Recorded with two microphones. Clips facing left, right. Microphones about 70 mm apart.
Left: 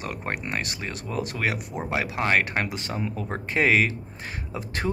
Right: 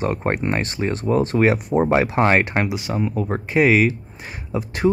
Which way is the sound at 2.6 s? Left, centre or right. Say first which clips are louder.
Right 7 dB; centre.